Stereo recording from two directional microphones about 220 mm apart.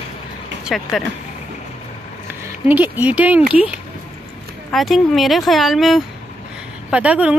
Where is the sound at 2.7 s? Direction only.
5° right (ahead or behind).